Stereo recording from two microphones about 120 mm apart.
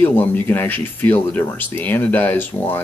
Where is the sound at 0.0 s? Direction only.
15° left (ahead or behind).